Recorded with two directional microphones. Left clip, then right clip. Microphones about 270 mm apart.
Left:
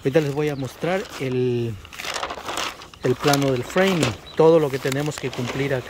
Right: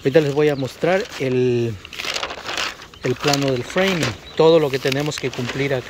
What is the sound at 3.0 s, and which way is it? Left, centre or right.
Speech, left.